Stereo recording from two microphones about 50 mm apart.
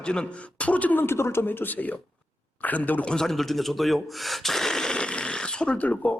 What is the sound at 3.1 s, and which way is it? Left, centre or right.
Speech, centre.